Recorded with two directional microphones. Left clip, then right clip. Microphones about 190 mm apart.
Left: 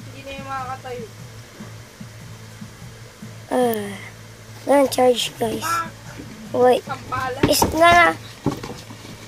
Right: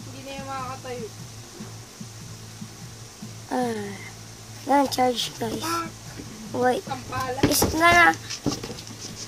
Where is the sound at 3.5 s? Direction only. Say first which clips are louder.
Left 7 dB; 15° left (ahead or behind).